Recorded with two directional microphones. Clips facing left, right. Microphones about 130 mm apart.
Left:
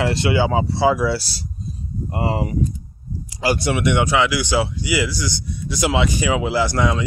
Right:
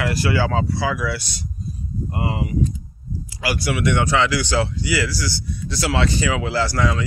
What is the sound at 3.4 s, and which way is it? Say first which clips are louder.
Speech: left 3 dB; 25° left (ahead or behind).